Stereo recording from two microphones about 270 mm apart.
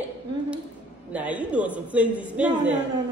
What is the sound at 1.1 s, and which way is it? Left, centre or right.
A woman's voice, centre.